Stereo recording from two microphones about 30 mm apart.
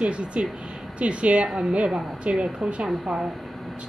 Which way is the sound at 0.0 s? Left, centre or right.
Right.